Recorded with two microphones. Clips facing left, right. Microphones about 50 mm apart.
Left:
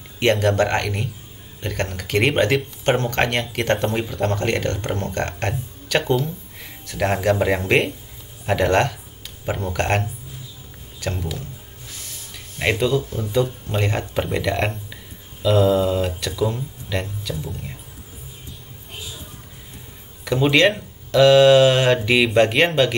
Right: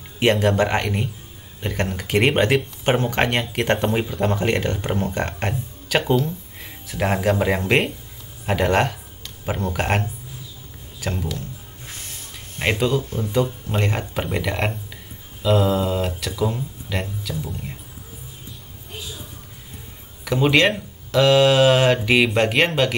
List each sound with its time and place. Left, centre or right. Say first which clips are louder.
0.2 s speech: even; centre
9.2 s a sound: even; centre
9.7 s speech: left 1 dB; centre
11.8 s a sound: right 2 dB; right
12.5 s speech: left 1 dB; centre
20.2 s speech: left 1 dB; centre